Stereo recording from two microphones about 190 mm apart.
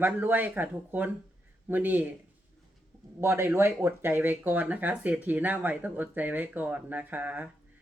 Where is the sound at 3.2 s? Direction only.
10° right (ahead or behind).